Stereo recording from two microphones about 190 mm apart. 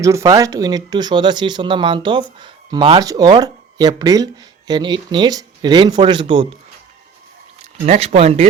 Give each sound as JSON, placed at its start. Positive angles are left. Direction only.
{"t": 0.0, "sound": "speech", "side_deg": -15}
{"t": 7.9, "sound": "speech", "side_deg": -35}